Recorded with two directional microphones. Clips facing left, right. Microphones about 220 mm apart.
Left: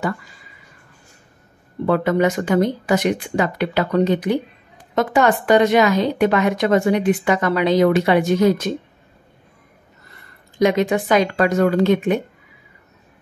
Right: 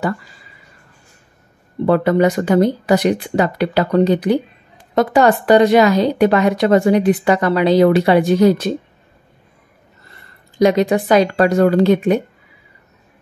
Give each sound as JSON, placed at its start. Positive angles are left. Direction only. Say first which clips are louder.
{"t": 1.9, "sound": "a woman's voice", "louder": "right 3 dB", "side_deg": -35}
{"t": 10.6, "sound": "a woman's voice", "louder": "right 3 dB", "side_deg": -35}